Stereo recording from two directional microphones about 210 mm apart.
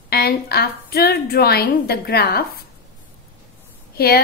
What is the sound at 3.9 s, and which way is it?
Speech, 45° left (ahead or behind).